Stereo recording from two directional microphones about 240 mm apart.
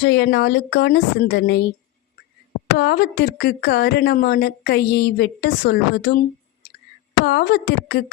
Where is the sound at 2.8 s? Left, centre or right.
Left.